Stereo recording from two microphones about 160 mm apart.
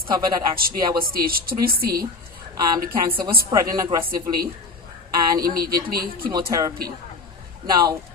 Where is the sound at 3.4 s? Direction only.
25° right (ahead or behind).